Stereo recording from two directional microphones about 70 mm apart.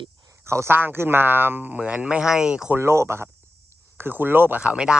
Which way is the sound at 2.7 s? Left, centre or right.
Right.